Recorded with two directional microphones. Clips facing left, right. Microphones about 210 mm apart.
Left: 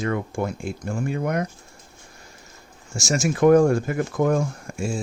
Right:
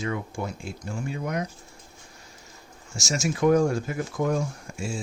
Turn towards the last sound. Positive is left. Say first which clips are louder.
# left 5 dB
turn(degrees=50)  # may be behind; listen again after turning